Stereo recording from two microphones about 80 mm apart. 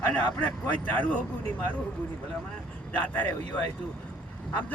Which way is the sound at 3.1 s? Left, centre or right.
Left.